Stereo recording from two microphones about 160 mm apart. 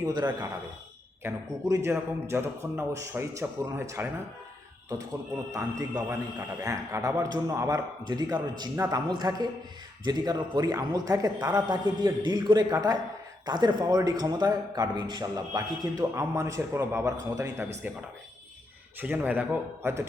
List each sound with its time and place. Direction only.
0.0 s a man's voice: 25° right (ahead or behind)
5.5 s a man's voice: 20° right (ahead or behind)
9.0 s a man's voice: 25° right (ahead or behind)
18.9 s a man's voice: 10° right (ahead or behind)